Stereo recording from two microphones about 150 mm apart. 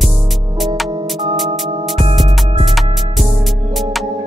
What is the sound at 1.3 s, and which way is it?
Music, centre (ahead or behind).